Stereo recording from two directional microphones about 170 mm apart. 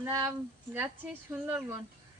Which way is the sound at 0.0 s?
20° right (ahead or behind).